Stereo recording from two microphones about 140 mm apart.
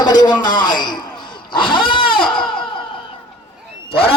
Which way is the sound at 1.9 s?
35° left (ahead or behind).